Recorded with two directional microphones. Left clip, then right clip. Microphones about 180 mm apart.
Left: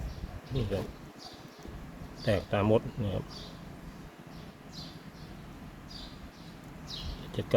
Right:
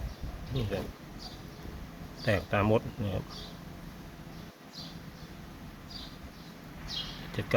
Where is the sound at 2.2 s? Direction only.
15° left (ahead or behind).